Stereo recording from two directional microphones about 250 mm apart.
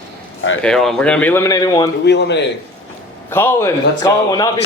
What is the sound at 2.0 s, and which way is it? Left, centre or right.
Speech, left.